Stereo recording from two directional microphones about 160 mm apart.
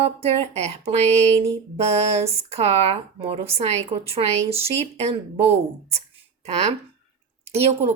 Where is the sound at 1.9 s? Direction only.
40° right (ahead or behind).